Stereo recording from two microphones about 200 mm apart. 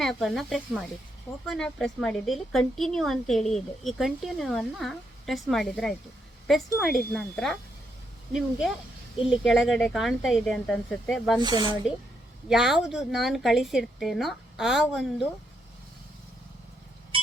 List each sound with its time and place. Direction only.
0.0 s a woman's voice: centre (ahead or behind)
11.3 s speech: 20° right (ahead or behind)
12.5 s a woman's voice: 5° right (ahead or behind)